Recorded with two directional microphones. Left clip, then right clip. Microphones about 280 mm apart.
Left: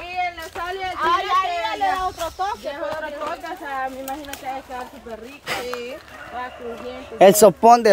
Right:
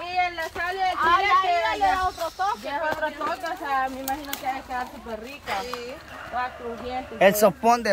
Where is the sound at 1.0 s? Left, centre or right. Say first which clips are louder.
Left 1 dB; left.